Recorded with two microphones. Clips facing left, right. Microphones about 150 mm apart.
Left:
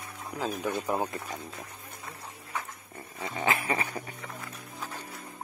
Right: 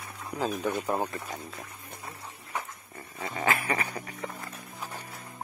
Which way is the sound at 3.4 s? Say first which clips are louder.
Even; 25° left (ahead or behind).